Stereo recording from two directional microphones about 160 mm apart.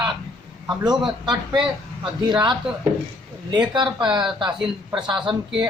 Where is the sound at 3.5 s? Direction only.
30° right (ahead or behind).